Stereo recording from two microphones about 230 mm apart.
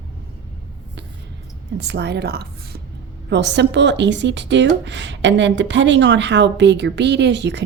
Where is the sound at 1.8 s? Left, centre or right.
Right.